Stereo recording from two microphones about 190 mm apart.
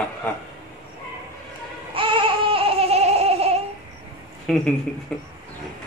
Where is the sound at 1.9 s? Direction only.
25° right (ahead or behind).